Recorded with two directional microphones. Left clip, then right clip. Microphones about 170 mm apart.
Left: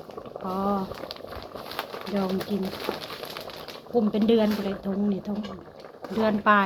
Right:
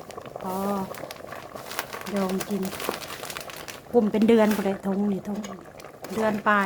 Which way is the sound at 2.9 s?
15° right (ahead or behind).